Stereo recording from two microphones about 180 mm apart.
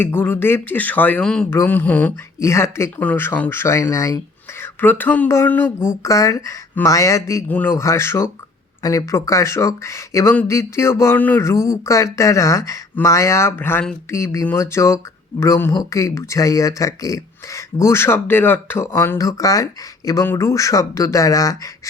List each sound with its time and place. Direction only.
0.0 s speech: 10° left (ahead or behind)